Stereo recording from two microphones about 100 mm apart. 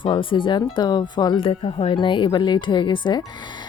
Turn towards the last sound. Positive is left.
turn(degrees=50)  # may be behind; listen again after turning